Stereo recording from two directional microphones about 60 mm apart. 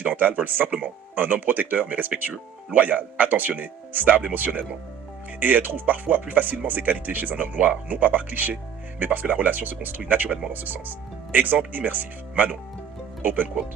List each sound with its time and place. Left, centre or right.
0.0 s speech: right
10.2 s speech: centre
10.5 s speech: right